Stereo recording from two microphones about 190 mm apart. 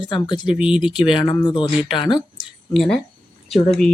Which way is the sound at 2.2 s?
Centre (ahead or behind).